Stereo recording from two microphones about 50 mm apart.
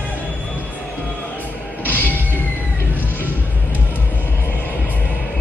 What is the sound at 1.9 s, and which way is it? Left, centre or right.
Music, left.